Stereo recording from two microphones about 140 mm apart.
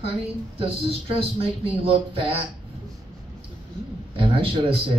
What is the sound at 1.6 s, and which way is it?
Speech, 40° right (ahead or behind).